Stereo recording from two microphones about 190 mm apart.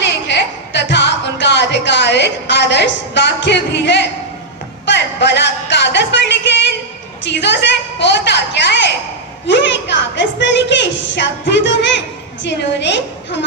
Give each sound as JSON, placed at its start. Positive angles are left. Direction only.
{"t": 0.0, "sound": "music", "side_deg": 65}
{"t": 4.9, "sound": "a sound", "side_deg": 65}
{"t": 9.5, "sound": "a woman's voice", "side_deg": 70}